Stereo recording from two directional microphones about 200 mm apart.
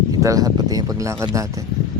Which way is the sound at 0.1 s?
15° right (ahead or behind).